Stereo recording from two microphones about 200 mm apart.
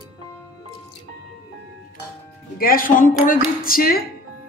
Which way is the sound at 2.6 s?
45° left (ahead or behind).